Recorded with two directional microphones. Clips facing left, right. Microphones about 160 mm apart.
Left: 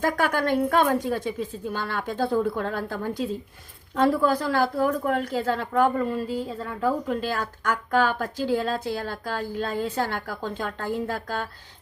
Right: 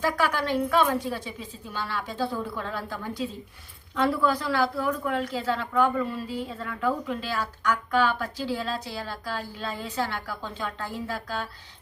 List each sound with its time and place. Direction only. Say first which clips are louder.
0.0 s speech: left 2 dB; 50° left (ahead or behind)